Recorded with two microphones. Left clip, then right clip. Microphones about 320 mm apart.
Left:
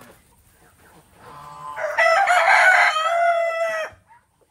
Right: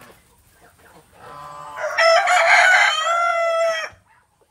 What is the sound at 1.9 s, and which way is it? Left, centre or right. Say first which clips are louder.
Chicken: right 2 dB; centre.